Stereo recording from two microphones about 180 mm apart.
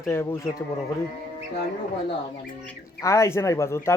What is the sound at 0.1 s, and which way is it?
Speech, 15° left (ahead or behind).